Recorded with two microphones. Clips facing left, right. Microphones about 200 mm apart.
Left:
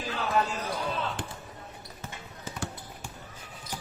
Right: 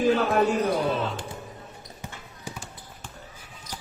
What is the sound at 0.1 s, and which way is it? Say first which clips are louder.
Speech: right 8 dB; 55° right (ahead or behind).